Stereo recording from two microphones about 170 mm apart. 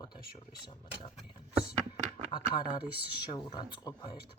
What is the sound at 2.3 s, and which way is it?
Speech, 25° left (ahead or behind).